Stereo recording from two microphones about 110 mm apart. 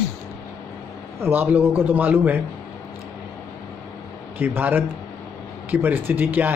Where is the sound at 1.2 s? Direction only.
15° right (ahead or behind).